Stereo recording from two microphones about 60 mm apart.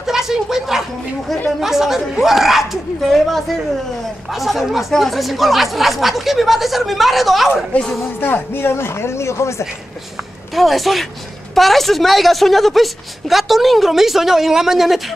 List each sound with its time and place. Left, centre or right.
0.0 s a sound: centre
1.6 s a woman's voice: centre
8.2 s speech: left
10.5 s a woman's voice: centre